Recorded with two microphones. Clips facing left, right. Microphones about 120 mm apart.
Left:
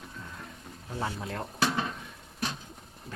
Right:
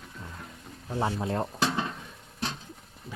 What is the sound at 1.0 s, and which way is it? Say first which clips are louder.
Speech: right 6 dB; 30° right (ahead or behind).